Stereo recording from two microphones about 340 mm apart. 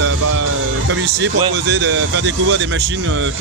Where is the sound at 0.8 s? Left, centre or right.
Right.